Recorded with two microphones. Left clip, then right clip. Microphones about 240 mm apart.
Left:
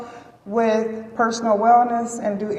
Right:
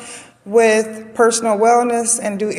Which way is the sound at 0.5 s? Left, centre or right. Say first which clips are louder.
Right 7 dB; right.